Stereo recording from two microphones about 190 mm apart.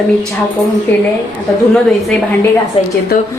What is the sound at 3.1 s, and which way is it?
Speech, 50° left (ahead or behind).